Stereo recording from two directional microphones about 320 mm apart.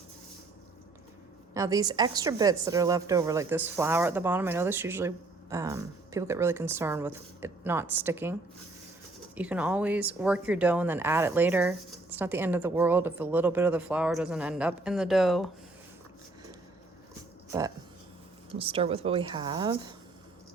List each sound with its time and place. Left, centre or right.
1.5 s a woman's voice: centre
18.5 s a woman's voice: centre